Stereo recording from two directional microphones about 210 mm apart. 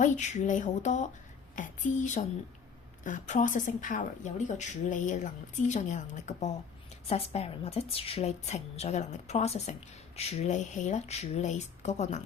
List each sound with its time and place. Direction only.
0.0 s a woman's voice: 35° left (ahead or behind)